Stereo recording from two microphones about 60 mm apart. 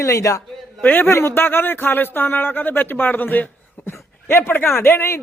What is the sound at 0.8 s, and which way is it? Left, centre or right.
Speech, left.